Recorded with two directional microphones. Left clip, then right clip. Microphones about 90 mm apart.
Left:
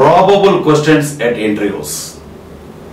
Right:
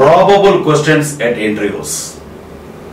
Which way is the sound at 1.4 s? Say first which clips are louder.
Even; 5° left (ahead or behind).